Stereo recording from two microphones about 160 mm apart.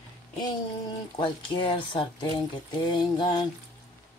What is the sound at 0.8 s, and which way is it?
Speech, 30° left (ahead or behind).